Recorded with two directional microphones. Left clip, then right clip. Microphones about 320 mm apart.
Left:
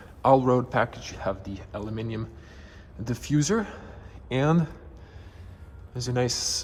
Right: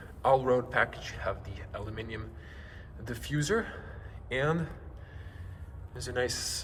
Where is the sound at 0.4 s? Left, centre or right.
Centre.